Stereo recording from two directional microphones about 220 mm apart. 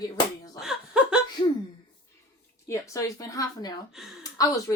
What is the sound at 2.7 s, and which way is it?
A woman's voice, 15° left (ahead or behind).